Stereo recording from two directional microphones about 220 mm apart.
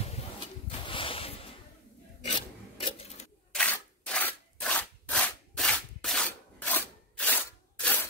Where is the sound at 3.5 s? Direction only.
5° left (ahead or behind).